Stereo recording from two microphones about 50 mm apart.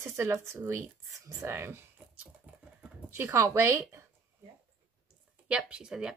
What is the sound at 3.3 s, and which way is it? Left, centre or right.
Speech, right.